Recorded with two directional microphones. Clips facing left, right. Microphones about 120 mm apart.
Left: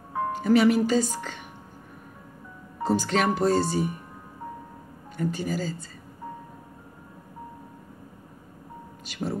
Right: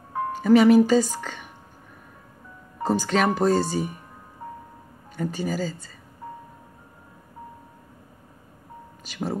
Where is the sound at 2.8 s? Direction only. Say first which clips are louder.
Right 2 dB; 45° right (ahead or behind).